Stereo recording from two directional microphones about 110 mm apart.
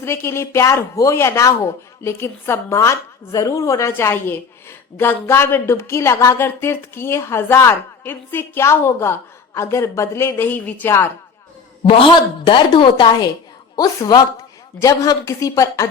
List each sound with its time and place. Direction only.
0.0 s speech: 25° left (ahead or behind)
11.8 s a woman's voice: 55° left (ahead or behind); by 15.9 s 30° left (ahead or behind)